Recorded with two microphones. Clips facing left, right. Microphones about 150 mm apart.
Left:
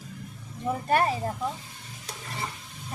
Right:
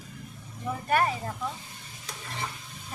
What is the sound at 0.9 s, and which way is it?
Speech, 30° left (ahead or behind).